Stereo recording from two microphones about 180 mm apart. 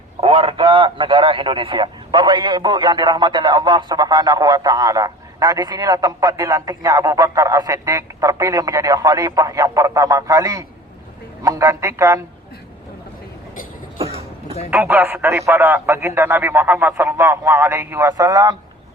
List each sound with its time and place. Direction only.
0.2 s speech: 30° right (ahead or behind); by 12.2 s 15° right (ahead or behind)
14.0 s cough: 35° right (ahead or behind)
14.7 s speech: 10° right (ahead or behind)